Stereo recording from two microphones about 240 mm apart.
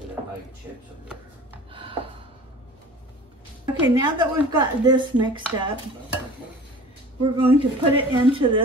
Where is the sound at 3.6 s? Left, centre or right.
Centre.